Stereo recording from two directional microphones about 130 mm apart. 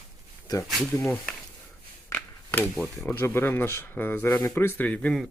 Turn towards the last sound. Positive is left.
turn(degrees=10)  # may be behind; listen again after turning